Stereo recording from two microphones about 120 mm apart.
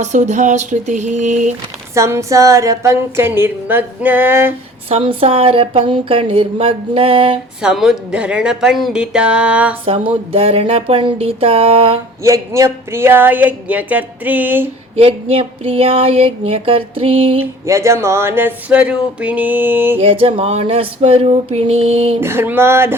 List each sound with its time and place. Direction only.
0.0 s speech: 80° right
2.0 s a sound: 25° right (ahead or behind)
4.9 s speech: 55° right (ahead or behind)
7.6 s speech: 5° right (ahead or behind)
9.8 s speech: 50° right (ahead or behind)
12.2 s speech: 25° right (ahead or behind)
14.9 s speech: 50° right (ahead or behind)
17.4 s speech: 25° right (ahead or behind)
20.0 s speech: 50° right (ahead or behind)
22.2 s a sound: 20° right (ahead or behind)